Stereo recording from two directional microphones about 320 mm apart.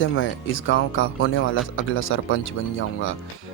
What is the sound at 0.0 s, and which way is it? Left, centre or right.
Speech, left.